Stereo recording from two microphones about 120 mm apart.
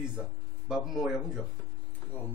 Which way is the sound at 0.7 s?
5° right (ahead or behind).